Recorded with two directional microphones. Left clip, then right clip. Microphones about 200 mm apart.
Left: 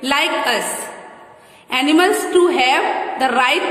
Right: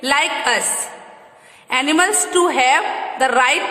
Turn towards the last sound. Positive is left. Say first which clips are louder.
# even
turn(degrees=-15)  # may be behind; listen again after turning